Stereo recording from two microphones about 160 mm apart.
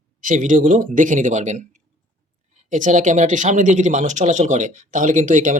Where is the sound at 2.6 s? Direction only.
50° right (ahead or behind).